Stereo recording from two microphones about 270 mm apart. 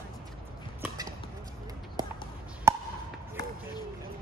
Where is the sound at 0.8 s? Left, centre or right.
Centre.